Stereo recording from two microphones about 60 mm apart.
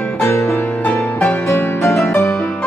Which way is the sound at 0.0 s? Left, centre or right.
Left.